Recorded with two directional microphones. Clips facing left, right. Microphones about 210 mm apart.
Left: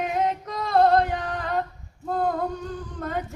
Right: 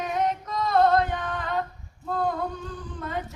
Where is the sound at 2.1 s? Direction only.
40° left (ahead or behind).